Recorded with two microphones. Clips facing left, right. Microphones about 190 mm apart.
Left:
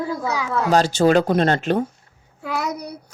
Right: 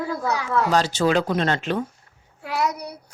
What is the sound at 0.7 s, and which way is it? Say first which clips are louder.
Speech: left 6 dB; 50° left (ahead or behind).